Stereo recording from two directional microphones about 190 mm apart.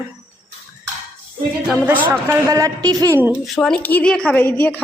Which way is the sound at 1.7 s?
10° right (ahead or behind).